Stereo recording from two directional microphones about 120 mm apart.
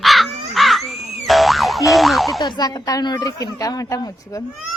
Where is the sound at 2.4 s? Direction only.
30° left (ahead or behind).